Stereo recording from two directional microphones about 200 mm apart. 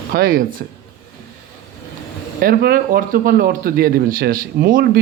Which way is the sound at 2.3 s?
50° right (ahead or behind).